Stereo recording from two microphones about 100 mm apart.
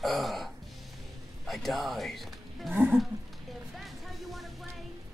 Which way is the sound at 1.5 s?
Centre (ahead or behind).